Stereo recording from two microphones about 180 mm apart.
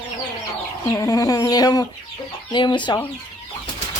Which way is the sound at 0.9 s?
20° left (ahead or behind).